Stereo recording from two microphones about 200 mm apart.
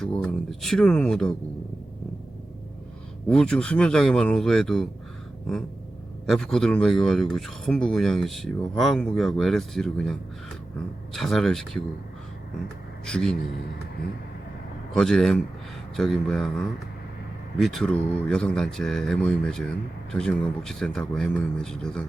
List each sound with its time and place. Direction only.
0.0 s speech: 5° left (ahead or behind)
3.2 s speech: 5° left (ahead or behind)
6.2 s speech: centre (ahead or behind)
13.1 s speech: 5° left (ahead or behind)
14.9 s speech: 5° left (ahead or behind)